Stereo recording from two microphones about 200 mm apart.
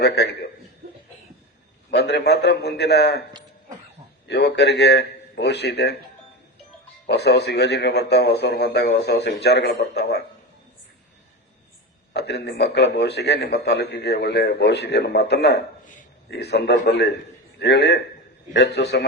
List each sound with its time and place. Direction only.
0.0 s a man's voice: 55° left (ahead or behind)
1.9 s a man's voice: 60° left (ahead or behind)
4.3 s a man's voice: 55° left (ahead or behind)
7.1 s a man's voice: 55° left (ahead or behind)
12.1 s a man's voice: 55° left (ahead or behind)
15.9 s a sound: 40° left (ahead or behind)
16.4 s a man's voice: 55° left (ahead or behind)